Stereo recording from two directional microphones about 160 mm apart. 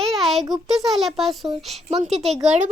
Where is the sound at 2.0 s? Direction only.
40° right (ahead or behind).